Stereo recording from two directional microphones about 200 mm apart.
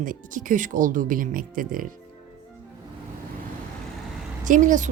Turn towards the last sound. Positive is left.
turn(degrees=-40)  # may be behind; listen again after turning